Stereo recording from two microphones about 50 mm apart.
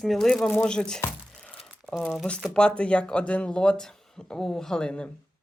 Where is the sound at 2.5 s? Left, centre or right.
Centre.